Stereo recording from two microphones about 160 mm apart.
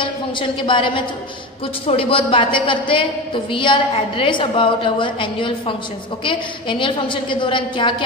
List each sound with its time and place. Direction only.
0.0 s a woman's voice: 30° left (ahead or behind)